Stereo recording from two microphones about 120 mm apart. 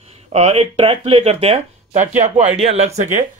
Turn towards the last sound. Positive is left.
turn(degrees=-75)  # may be behind; listen again after turning